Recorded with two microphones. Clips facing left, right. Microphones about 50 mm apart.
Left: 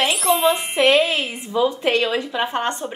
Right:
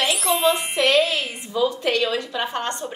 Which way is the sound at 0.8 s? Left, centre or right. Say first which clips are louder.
Left 3 dB; centre.